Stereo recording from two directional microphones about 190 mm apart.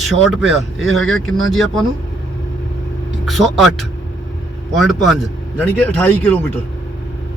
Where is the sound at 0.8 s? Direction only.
90° left.